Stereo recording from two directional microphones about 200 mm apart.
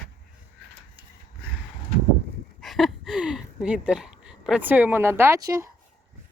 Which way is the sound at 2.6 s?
Centre (ahead or behind).